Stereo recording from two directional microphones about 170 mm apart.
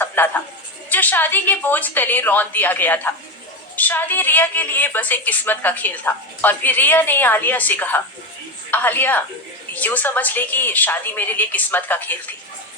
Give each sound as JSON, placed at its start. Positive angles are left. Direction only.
{"t": 0.2, "sound": "a woman's voice", "side_deg": 10}